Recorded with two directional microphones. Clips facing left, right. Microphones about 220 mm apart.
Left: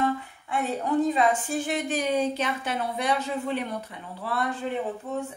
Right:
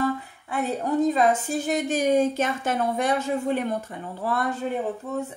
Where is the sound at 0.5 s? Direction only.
40° right (ahead or behind).